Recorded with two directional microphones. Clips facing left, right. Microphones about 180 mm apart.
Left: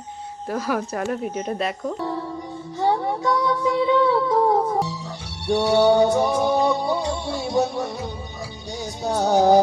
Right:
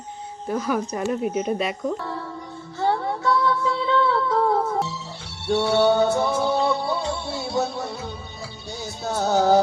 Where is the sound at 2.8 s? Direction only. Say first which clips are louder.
Left 2 dB; 15° left (ahead or behind).